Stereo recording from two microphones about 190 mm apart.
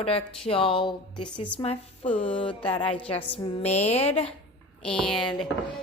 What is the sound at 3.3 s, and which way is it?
A woman's voice, 30° left (ahead or behind).